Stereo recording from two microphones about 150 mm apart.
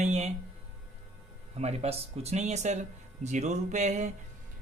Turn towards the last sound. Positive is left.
turn(degrees=-50)  # may be behind; listen again after turning